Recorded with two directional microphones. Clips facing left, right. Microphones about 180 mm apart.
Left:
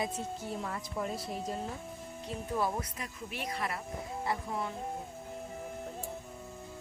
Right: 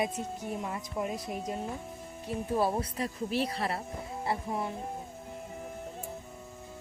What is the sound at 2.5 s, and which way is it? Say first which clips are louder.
A woman's voice: right 4 dB; 30° right (ahead or behind).